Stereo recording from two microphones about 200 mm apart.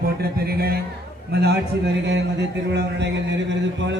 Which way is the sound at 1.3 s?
55° right (ahead or behind).